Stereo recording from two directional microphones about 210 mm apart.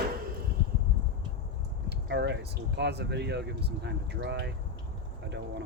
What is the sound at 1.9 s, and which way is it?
Speech, 55° right (ahead or behind).